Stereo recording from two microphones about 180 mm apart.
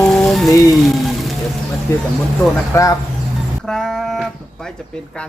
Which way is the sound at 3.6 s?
5° left (ahead or behind).